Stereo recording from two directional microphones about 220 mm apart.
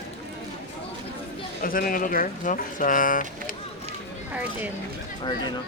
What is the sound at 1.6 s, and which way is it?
Speech, 40° left (ahead or behind).